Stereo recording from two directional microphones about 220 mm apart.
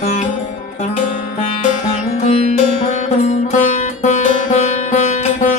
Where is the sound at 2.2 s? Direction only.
30° left (ahead or behind).